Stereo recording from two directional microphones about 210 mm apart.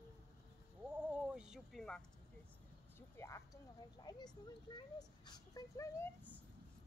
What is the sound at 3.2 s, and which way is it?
Speech, 15° left (ahead or behind).